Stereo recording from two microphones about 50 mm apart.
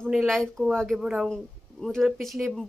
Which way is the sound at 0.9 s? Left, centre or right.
Centre.